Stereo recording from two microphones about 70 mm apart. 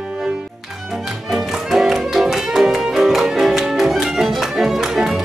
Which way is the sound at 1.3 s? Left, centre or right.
Centre.